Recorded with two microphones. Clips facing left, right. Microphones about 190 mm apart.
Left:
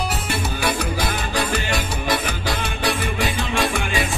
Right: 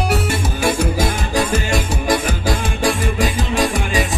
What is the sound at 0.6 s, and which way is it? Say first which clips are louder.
Music: right 6 dB; 45° right (ahead or behind).